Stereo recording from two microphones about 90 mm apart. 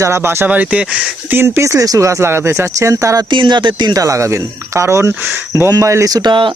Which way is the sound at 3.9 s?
35° right (ahead or behind).